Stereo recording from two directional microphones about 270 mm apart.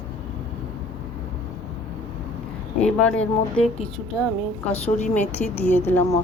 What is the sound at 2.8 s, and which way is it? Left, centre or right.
Speech, centre.